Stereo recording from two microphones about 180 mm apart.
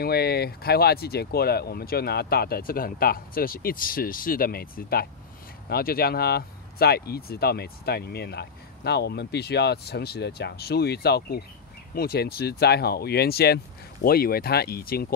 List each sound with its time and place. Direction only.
0.0 s speech: 60° left (ahead or behind)